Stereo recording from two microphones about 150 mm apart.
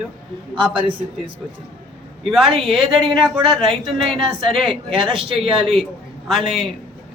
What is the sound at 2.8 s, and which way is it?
Speech, 35° right (ahead or behind).